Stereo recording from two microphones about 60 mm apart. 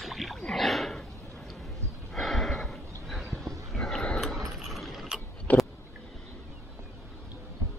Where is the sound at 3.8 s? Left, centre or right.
Centre.